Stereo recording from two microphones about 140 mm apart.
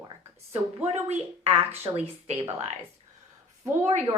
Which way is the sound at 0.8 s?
50° right (ahead or behind).